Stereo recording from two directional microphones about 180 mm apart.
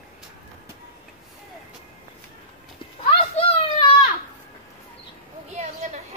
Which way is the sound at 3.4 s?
30° left (ahead or behind).